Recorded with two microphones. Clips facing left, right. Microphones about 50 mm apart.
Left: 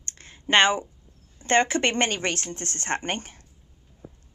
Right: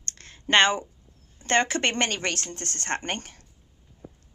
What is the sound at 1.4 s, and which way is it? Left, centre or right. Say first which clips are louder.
Speech: left 2 dB; centre.